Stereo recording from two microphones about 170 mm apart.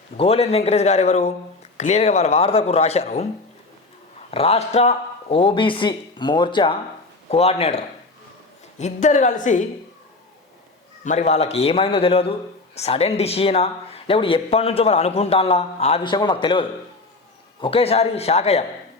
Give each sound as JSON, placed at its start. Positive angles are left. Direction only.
{"t": 0.2, "sound": "speech", "side_deg": 35}
{"t": 4.3, "sound": "a woman's voice", "side_deg": 35}
{"t": 11.0, "sound": "speech", "side_deg": 45}
{"t": 16.1, "sound": "a man's voice", "side_deg": 25}